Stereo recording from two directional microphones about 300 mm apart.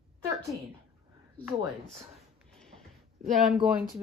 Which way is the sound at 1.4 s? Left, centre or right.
Centre.